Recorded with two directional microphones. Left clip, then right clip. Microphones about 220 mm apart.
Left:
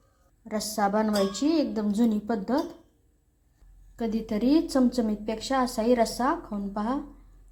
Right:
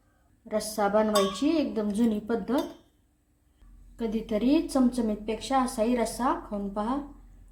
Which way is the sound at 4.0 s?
20° left (ahead or behind).